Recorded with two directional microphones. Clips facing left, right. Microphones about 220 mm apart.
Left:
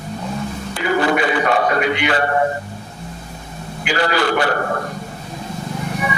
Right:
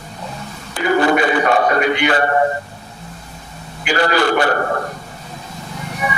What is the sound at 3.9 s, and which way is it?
Speech, 50° right (ahead or behind).